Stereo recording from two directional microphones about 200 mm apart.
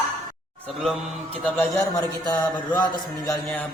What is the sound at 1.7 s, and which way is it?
A man's voice, 20° left (ahead or behind).